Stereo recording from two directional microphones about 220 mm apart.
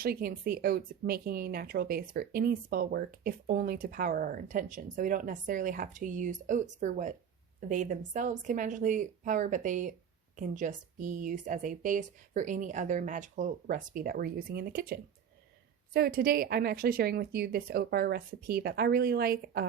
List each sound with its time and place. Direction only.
0.0 s speech: 40° right (ahead or behind)